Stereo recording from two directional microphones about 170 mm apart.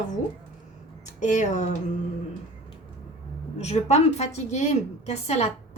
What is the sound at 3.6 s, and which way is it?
A woman's voice, 40° left (ahead or behind).